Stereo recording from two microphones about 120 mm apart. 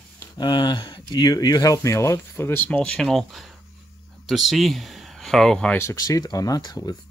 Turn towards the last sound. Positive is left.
turn(degrees=35)  # may be behind; listen again after turning